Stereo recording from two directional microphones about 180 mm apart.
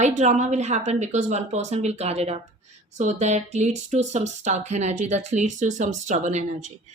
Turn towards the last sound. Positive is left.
turn(degrees=-40)  # may be behind; listen again after turning